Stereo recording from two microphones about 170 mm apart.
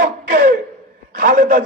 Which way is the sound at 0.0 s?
60° right (ahead or behind).